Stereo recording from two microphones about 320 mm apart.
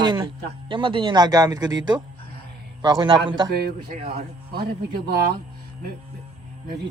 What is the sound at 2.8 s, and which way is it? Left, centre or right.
Speech, centre.